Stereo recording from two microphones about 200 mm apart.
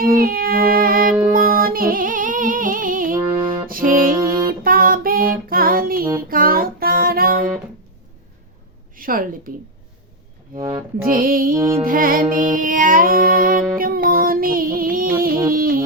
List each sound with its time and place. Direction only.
0.0 s music: 45° right (ahead or behind)
3.2 s music: 25° right (ahead or behind)
3.7 s music: 45° right (ahead or behind)
9.0 s a sound: 45° right (ahead or behind)
10.5 s speech: 25° right (ahead or behind)
11.0 s music: 45° right (ahead or behind)